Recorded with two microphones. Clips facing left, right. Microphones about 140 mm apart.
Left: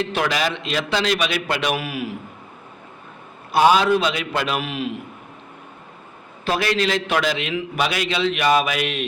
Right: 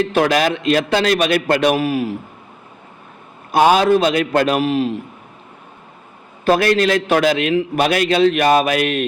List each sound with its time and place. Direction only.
0.0 s a man's voice: 45° right (ahead or behind)
3.5 s a man's voice: 50° right (ahead or behind)
6.4 s a man's voice: 50° right (ahead or behind)